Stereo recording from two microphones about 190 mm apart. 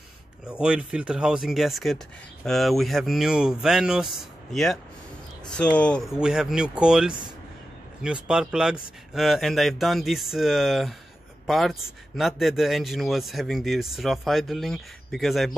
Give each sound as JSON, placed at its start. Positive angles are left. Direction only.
{"t": 0.5, "sound": "a man's voice", "side_deg": -5}